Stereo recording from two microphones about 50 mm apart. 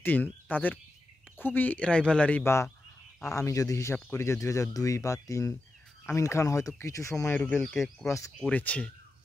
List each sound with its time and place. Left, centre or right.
0.0 s speech: left
1.8 s speech: left
2.4 s speech: left
3.3 s speech: left
3.9 s speech: left
7.6 s speech: centre
8.5 s speech: left